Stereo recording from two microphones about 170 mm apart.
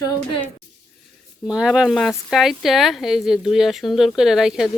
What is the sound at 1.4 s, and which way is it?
Speech, 5° right (ahead or behind).